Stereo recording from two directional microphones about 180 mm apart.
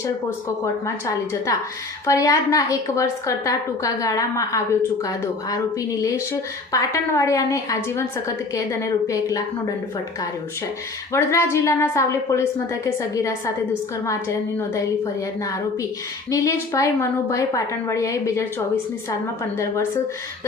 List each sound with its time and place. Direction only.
0.6 s a woman's voice: 15° left (ahead or behind)
11.1 s a woman's voice: 15° left (ahead or behind)